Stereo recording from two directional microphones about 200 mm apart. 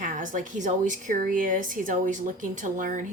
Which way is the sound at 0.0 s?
40° right (ahead or behind).